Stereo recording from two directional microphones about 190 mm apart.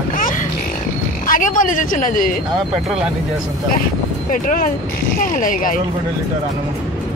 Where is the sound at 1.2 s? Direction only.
45° left (ahead or behind).